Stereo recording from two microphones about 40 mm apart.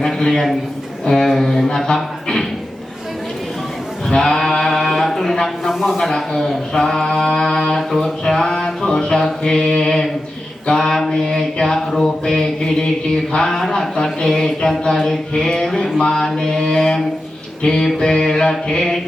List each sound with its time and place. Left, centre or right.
0.0 s a sound: centre
1.0 s speech: centre
4.2 s mantra: centre
5.6 s a sound: centre
6.0 s mantra: centre
11.6 s speech: centre
15.9 s speech: centre